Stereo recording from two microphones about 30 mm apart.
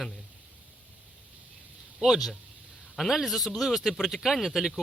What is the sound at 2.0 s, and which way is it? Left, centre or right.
Speech, centre.